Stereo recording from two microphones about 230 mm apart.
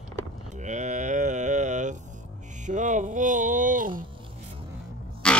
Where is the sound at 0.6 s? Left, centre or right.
Right.